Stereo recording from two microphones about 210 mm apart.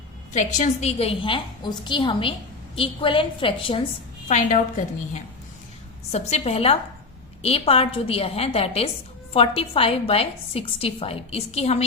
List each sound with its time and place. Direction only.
0.3 s a woman's voice: 35° left (ahead or behind)
4.3 s a woman's voice: 35° left (ahead or behind)
6.1 s a woman's voice: 30° left (ahead or behind)